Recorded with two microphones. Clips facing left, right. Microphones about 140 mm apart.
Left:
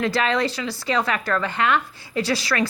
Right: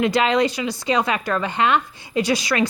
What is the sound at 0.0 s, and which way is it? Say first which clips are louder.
Speech: right 4 dB; 20° right (ahead or behind).